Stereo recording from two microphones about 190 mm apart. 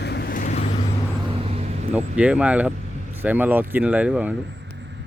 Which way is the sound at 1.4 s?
35° right (ahead or behind).